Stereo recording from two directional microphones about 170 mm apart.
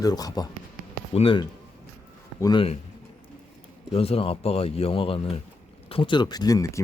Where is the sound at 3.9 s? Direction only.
35° left (ahead or behind).